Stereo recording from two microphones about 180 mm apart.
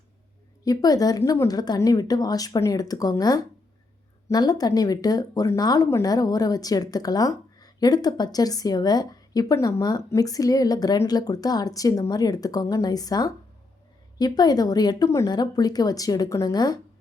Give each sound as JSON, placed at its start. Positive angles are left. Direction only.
{"t": 0.6, "sound": "speech", "side_deg": 20}